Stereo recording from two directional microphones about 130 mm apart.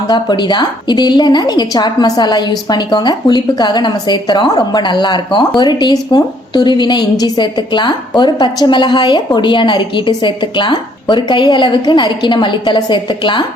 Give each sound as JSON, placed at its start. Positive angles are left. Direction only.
{"t": 0.1, "sound": "a woman's voice", "side_deg": 35}